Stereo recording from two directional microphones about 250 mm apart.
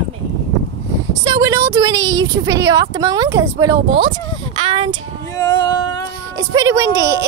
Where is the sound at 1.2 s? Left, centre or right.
Centre.